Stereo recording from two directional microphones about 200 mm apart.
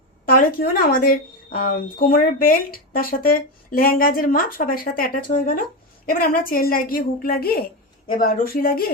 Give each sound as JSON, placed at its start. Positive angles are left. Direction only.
{"t": 0.3, "sound": "a woman's voice", "side_deg": 45}